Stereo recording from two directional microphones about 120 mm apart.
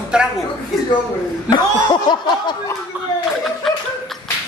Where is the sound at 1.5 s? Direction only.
35° left (ahead or behind).